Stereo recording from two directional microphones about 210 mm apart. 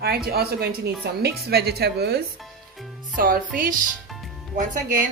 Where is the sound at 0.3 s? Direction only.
50° right (ahead or behind).